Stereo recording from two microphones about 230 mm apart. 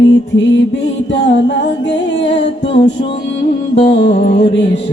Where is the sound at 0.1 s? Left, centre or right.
Left.